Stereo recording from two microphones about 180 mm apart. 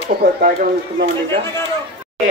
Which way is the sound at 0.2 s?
60° right (ahead or behind).